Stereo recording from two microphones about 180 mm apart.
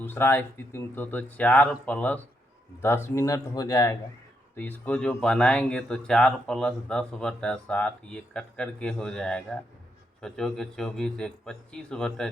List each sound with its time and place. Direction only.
0.0 s speech: 10° left (ahead or behind)